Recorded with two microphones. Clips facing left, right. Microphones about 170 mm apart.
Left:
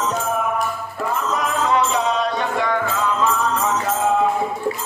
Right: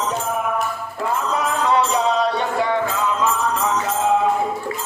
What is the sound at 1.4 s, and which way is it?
Music, 35° right (ahead or behind).